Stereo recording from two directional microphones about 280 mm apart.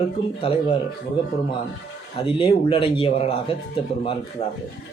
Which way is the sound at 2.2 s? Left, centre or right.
Centre.